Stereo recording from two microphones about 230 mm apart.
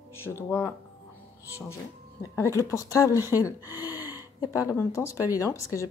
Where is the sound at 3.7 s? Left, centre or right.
Centre.